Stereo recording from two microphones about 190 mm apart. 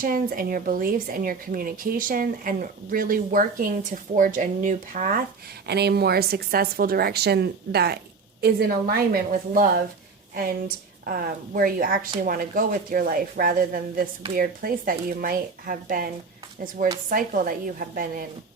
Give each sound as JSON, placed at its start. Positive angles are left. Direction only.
{"t": 0.0, "sound": "a woman's voice", "side_deg": -45}
{"t": 5.6, "sound": "a woman's voice", "side_deg": -60}
{"t": 11.0, "sound": "a woman's voice", "side_deg": -50}